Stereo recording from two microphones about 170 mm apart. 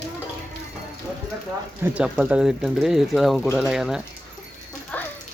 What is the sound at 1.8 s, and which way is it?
Speech, 5° right (ahead or behind).